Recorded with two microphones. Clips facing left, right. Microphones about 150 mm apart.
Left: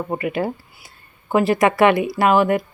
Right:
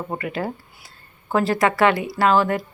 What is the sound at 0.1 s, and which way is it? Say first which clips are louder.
Speech: left 5 dB; 15° left (ahead or behind).